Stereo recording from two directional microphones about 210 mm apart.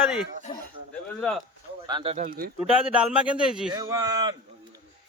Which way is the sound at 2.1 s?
40° right (ahead or behind).